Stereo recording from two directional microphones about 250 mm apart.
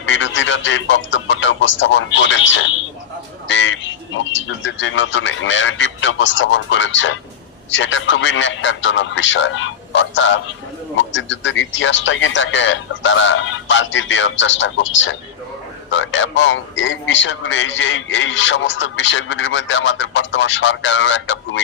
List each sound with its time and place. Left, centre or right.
0.0 s a man's voice: left